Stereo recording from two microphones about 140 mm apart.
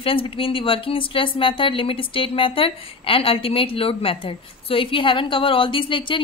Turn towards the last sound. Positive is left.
turn(degrees=35)  # may be behind; listen again after turning